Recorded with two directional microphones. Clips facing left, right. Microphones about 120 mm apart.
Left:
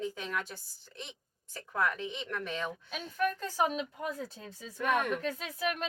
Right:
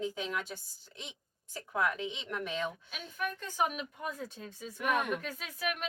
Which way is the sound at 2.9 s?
40° left (ahead or behind).